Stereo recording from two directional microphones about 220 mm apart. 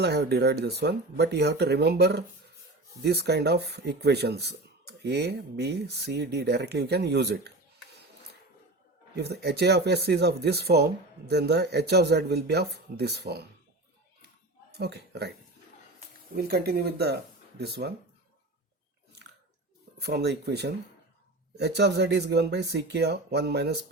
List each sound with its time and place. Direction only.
0.0 s speech: 50° right (ahead or behind)
9.1 s speech: 50° right (ahead or behind)
14.7 s speech: 50° right (ahead or behind)
16.3 s speech: 45° right (ahead or behind)
20.0 s speech: 50° right (ahead or behind)